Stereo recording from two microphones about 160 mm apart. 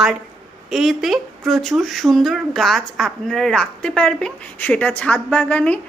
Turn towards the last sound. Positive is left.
turn(degrees=10)  # may be behind; listen again after turning